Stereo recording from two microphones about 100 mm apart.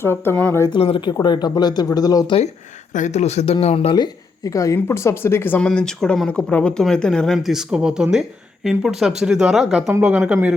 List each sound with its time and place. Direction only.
0.0 s speech: 25° left (ahead or behind)
0.7 s speech: 65° left (ahead or behind)
1.1 s speech: 45° left (ahead or behind)
3.2 s speech: 90° left
3.9 s speech: 40° left (ahead or behind); by 5.5 s 25° left (ahead or behind)
5.5 s speech: 10° left (ahead or behind)
7.3 s speech: 5° right (ahead or behind)
10.0 s speech: 10° right (ahead or behind)